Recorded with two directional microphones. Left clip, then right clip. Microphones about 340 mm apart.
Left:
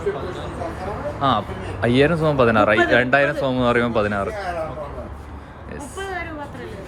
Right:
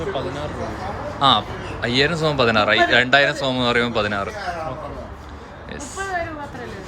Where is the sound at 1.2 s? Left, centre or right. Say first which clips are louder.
Right 4 dB; centre.